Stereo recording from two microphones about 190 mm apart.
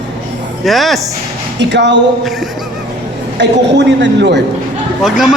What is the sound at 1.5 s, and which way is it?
Speech, 65° right (ahead or behind).